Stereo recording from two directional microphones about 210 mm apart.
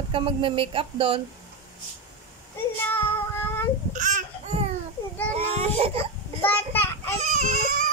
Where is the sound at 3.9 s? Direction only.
35° right (ahead or behind).